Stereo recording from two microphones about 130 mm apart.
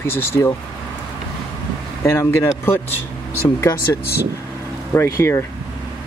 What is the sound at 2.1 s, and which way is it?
Speech, 20° left (ahead or behind).